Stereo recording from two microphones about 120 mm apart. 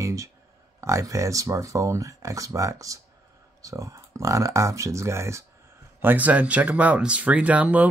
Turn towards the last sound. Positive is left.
turn(degrees=-10)  # may be behind; listen again after turning